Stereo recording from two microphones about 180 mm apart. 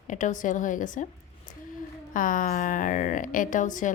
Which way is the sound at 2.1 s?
50° left (ahead or behind).